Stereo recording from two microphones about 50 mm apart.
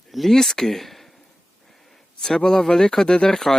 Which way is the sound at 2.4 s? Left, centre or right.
Centre.